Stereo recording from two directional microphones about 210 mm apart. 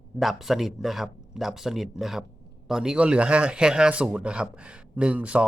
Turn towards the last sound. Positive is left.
turn(degrees=-5)  # may be behind; listen again after turning